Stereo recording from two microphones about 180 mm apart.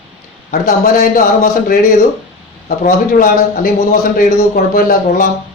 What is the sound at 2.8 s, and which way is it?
Speech, 50° left (ahead or behind).